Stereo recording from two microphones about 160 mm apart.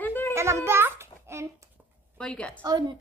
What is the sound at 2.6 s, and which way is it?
Speech, 25° right (ahead or behind).